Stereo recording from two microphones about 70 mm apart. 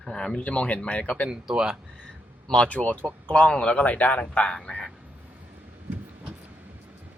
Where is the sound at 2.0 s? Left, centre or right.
Centre.